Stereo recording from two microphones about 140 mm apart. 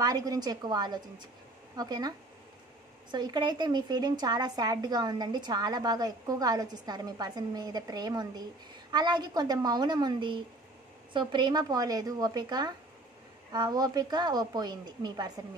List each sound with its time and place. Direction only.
0.0 s a woman's voice: 25° right (ahead or behind)